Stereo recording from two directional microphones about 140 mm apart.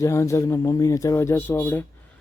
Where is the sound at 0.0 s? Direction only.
20° left (ahead or behind).